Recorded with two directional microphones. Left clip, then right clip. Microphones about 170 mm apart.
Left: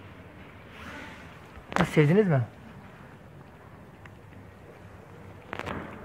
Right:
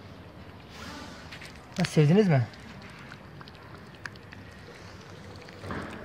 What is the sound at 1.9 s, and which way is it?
Speech, centre (ahead or behind).